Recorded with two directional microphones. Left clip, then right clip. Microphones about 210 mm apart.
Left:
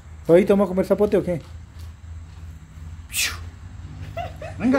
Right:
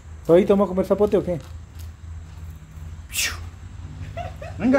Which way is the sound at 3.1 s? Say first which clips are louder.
Left 1 dB; centre (ahead or behind).